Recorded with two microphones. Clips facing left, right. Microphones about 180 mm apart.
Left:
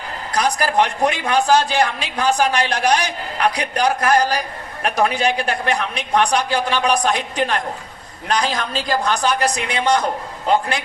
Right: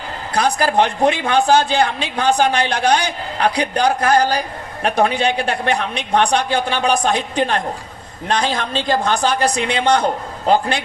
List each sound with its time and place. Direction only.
0.3 s a man's voice: 30° right (ahead or behind)